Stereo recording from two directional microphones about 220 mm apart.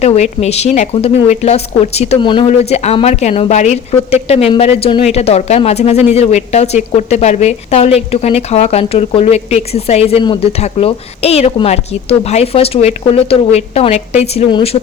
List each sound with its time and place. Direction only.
0.0 s speech: 30° left (ahead or behind)